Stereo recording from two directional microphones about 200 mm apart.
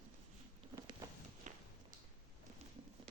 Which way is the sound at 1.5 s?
40° right (ahead or behind).